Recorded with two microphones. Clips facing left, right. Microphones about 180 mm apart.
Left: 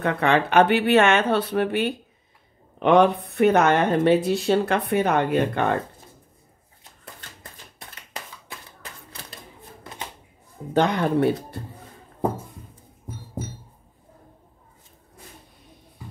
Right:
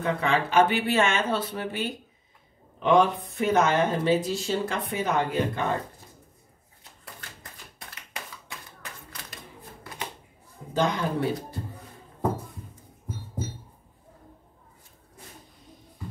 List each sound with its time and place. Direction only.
0.0 s speech: 65° left (ahead or behind)
10.7 s speech: 65° left (ahead or behind)